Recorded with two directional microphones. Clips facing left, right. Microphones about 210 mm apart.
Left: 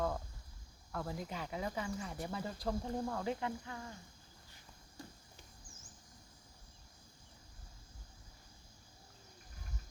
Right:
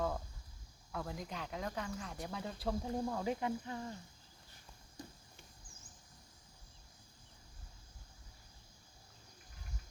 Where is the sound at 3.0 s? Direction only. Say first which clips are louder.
Right 1 dB; 10° right (ahead or behind).